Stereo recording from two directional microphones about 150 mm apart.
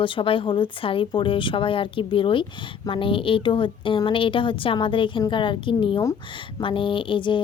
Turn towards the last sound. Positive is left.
turn(degrees=35)  # may be behind; listen again after turning